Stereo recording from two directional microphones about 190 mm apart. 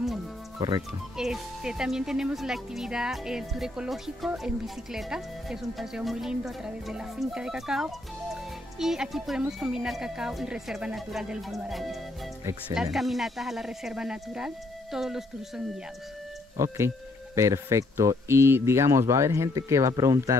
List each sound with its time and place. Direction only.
0.6 s speech: 25° right (ahead or behind)
1.1 s speech: centre (ahead or behind)
16.5 s speech: 15° right (ahead or behind)